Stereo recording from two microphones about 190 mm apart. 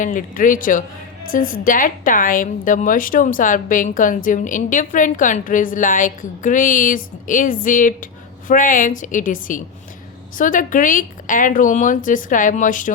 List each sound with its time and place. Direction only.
0.0 s a woman's voice: 45° left (ahead or behind)